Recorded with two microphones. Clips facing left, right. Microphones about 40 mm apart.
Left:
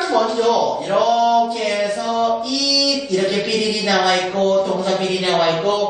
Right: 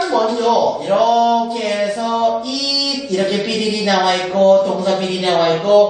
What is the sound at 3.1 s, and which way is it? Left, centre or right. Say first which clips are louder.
Mantra: right 3 dB; centre.